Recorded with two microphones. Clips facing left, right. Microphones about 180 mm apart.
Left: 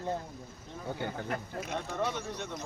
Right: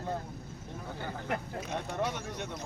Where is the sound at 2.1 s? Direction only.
15° right (ahead or behind).